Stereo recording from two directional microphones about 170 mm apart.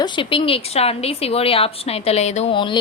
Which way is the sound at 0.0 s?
30° left (ahead or behind).